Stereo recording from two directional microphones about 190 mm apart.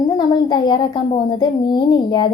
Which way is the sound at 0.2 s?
20° left (ahead or behind).